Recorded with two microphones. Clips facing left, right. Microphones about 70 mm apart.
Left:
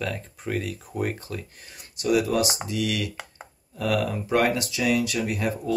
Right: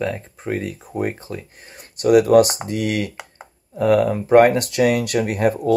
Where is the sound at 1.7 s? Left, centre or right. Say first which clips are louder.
Right 9 dB; right.